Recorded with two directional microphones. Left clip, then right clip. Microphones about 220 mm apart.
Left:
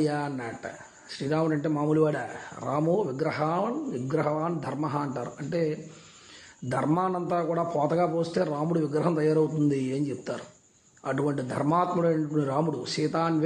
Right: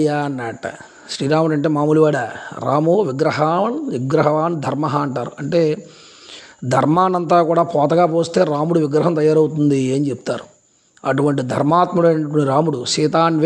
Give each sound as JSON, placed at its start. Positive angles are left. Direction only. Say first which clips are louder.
{"t": 0.0, "sound": "a man's voice", "louder": "right 10 dB", "side_deg": -35}